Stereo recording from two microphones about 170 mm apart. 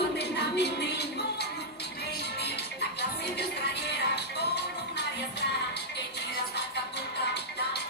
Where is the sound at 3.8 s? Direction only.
75° left (ahead or behind).